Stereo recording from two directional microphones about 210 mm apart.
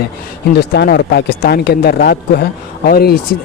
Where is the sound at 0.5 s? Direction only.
50° left (ahead or behind).